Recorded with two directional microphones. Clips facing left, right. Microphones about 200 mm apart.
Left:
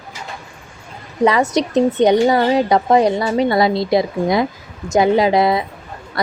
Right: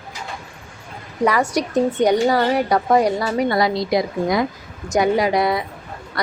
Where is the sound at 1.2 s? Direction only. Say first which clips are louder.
Left 4 dB; 25° left (ahead or behind).